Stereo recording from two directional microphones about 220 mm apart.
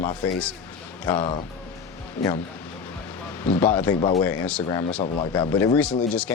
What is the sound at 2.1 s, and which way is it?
Speech, 10° left (ahead or behind).